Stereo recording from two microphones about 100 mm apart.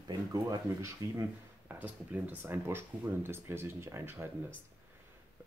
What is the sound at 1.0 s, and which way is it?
Speech, 30° right (ahead or behind).